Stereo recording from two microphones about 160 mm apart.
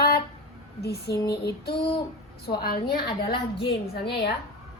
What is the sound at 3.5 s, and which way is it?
Speech, 90° left.